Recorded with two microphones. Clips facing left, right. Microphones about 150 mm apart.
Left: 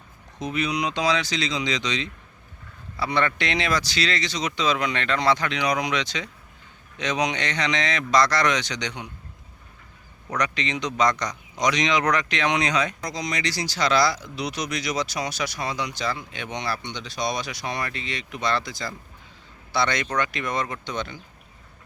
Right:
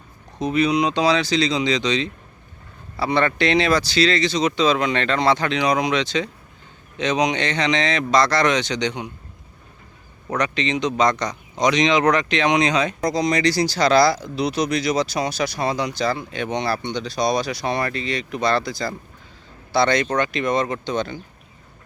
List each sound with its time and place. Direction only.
0.3 s a man's voice: 35° right (ahead or behind)
10.3 s a man's voice: 25° right (ahead or behind)